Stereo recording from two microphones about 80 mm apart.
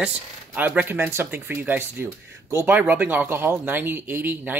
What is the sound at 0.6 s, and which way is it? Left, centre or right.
Speech, right.